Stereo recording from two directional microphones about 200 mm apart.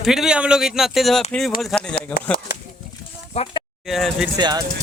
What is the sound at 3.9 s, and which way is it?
Speech, centre (ahead or behind).